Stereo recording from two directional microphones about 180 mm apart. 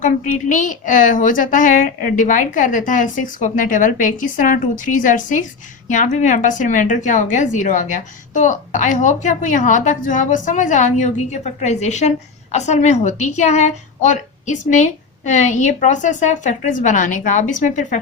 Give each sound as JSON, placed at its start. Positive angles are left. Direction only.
{"t": 0.0, "sound": "a woman's voice", "side_deg": 45}